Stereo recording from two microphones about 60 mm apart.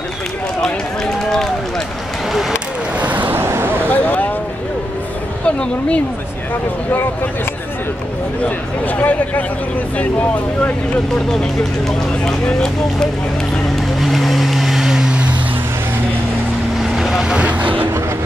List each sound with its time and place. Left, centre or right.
3.0 s vehicle: right
3.4 s a sound: right
3.9 s a sound: left
5.4 s speech: centre
8.4 s speech: left
12.3 s speech: centre
13.9 s vehicle: centre
16.9 s speech: centre; by 17.8 s right